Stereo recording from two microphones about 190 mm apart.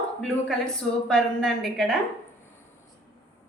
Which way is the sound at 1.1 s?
5° left (ahead or behind).